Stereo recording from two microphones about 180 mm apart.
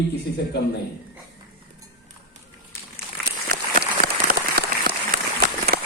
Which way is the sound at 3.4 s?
60° right (ahead or behind).